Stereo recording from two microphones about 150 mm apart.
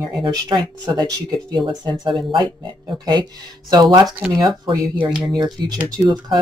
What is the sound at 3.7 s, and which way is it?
Speech, 25° right (ahead or behind).